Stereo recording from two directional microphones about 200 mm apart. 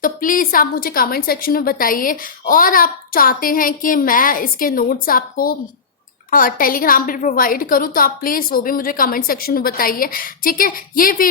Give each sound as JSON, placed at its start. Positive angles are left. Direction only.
{"t": 0.0, "sound": "a woman's voice", "side_deg": 45}